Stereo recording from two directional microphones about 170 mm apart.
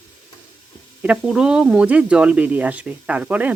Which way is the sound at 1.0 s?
5° right (ahead or behind).